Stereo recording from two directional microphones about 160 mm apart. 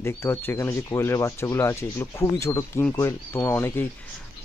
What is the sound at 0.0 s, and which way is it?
Speech, 15° left (ahead or behind).